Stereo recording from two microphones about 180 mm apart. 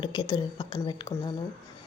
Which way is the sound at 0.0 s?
25° left (ahead or behind).